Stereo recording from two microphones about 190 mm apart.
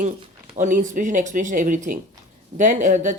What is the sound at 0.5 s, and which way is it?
Speech, 40° right (ahead or behind).